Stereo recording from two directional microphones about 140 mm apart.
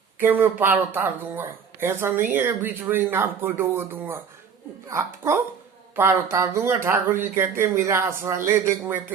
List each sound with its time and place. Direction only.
0.2 s speech: 15° right (ahead or behind)